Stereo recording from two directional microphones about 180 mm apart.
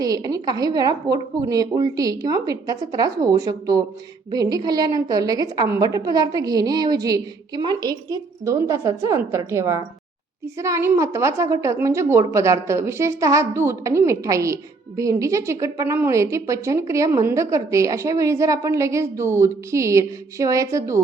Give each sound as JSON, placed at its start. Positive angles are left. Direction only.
{"t": 0.0, "sound": "a woman's voice", "side_deg": -20}